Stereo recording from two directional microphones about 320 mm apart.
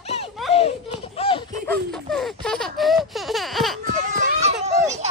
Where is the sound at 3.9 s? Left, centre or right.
Right.